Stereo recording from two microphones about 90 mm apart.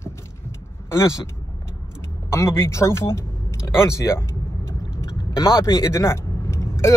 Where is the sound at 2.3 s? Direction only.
30° left (ahead or behind).